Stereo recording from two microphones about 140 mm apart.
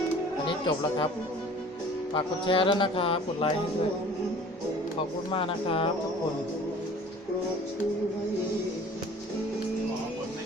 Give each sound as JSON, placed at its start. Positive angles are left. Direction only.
{"t": 2.1, "sound": "speech", "side_deg": 40}
{"t": 5.3, "sound": "speech", "side_deg": 40}